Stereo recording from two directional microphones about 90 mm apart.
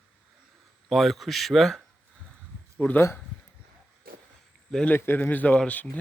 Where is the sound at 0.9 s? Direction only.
Centre (ahead or behind).